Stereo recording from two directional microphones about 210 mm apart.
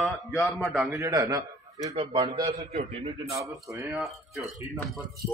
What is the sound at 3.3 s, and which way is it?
Speech, 15° right (ahead or behind).